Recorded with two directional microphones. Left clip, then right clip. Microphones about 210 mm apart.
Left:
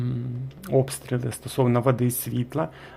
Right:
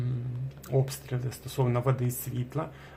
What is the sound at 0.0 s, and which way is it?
Speech, 35° left (ahead or behind).